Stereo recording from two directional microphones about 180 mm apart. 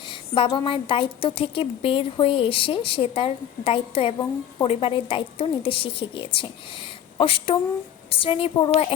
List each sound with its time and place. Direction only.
0.1 s a woman's voice: 30° left (ahead or behind)